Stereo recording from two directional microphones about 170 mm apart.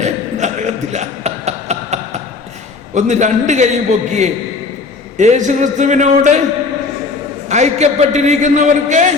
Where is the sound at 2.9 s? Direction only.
45° right (ahead or behind).